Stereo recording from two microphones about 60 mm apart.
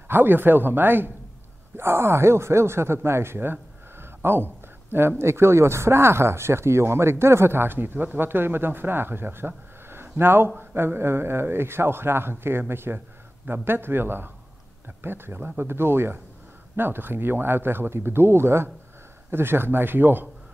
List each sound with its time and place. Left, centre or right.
0.1 s speech: right
1.8 s speech: right
4.0 s a sound: right
4.9 s speech: right
9.8 s a sound: right
10.6 s speech: right